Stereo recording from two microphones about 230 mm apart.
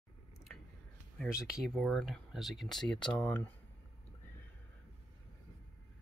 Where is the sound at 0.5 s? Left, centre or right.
Centre.